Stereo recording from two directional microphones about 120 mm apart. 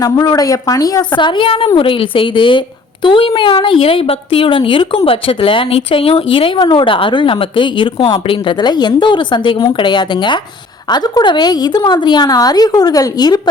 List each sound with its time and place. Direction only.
0.0 s a woman's voice: 35° left (ahead or behind)